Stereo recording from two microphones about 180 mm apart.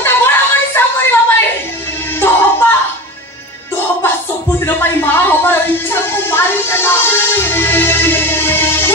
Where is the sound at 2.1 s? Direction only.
10° left (ahead or behind).